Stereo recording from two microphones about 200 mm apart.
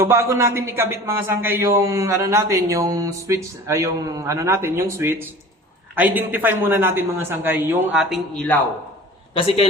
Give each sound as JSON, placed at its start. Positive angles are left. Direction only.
{"t": 0.0, "sound": "a man's voice", "side_deg": -10}
{"t": 9.3, "sound": "a man's voice", "side_deg": 30}